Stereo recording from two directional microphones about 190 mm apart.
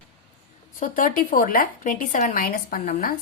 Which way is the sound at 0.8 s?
45° left (ahead or behind).